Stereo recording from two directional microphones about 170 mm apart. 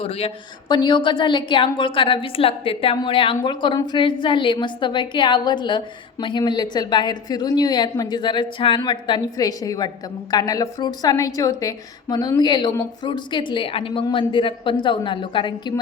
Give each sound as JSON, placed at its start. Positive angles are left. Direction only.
{"t": 0.0, "sound": "a woman's voice", "side_deg": 35}